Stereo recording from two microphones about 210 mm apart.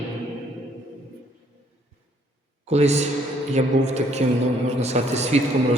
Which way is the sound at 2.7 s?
30° right (ahead or behind).